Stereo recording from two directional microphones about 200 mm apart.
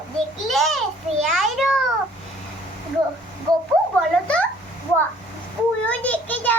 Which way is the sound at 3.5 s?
20° right (ahead or behind).